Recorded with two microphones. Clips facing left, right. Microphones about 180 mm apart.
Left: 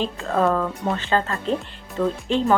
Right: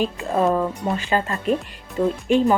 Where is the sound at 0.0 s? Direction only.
15° right (ahead or behind).